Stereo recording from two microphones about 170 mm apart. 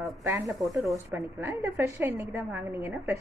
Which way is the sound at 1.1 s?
15° right (ahead or behind).